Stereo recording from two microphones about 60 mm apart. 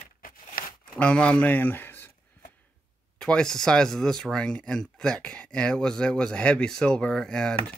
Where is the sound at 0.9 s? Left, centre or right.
Left.